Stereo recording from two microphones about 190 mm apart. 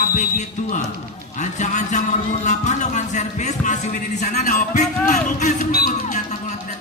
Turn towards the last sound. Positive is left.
turn(degrees=40)  # may be behind; listen again after turning